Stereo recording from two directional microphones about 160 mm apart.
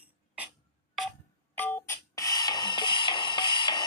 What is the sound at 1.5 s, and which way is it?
Music, 10° left (ahead or behind).